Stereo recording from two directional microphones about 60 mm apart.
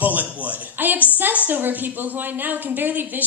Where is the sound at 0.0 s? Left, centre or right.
Right.